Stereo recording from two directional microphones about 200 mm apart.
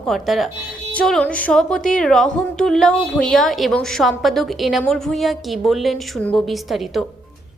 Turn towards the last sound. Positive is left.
turn(degrees=0)  # may be behind; listen again after turning